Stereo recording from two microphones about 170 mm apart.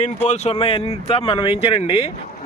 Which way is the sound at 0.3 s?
40° left (ahead or behind).